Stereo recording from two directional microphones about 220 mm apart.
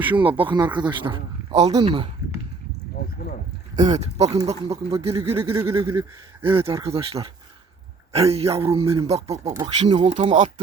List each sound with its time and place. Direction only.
0.2 s a man's voice: 25° right (ahead or behind)
3.0 s boat: 45° left (ahead or behind)
3.8 s a man's voice: 30° right (ahead or behind)
5.3 s a sound: 10° right (ahead or behind)
6.4 s a man's voice: 25° right (ahead or behind)